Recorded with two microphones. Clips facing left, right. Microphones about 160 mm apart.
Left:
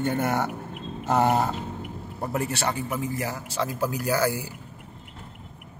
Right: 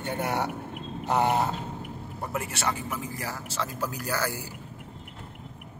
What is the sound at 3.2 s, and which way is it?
A man's voice, 15° left (ahead or behind).